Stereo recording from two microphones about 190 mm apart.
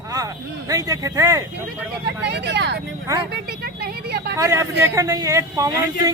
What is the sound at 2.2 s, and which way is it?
Speech, 65° right (ahead or behind).